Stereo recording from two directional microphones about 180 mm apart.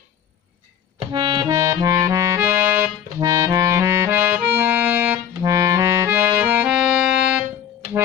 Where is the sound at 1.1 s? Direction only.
20° right (ahead or behind); by 6.9 s 5° right (ahead or behind).